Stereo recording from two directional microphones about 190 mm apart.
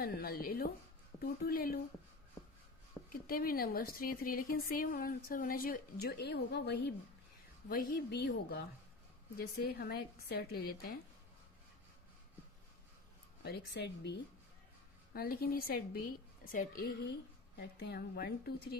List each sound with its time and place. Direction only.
0.0 s speech: 50° left (ahead or behind)
3.1 s speech: 50° left (ahead or behind)
7.7 s a woman's voice: 50° left (ahead or behind)
13.4 s a woman's voice: 60° left (ahead or behind)
15.1 s a woman's voice: 50° left (ahead or behind)